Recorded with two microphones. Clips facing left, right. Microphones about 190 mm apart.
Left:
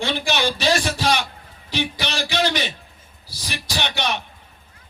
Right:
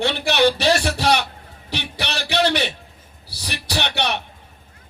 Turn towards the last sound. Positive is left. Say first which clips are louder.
# right 2 dB
turn(degrees=-65)  # may be behind; listen again after turning